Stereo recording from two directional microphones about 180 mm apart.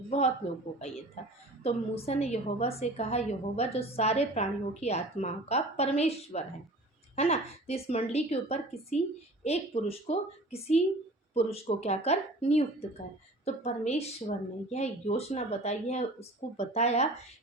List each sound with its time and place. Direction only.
1.6 s a woman's voice: 35° left (ahead or behind)